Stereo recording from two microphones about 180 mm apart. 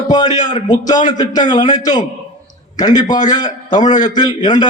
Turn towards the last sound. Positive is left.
turn(degrees=25)  # may be behind; listen again after turning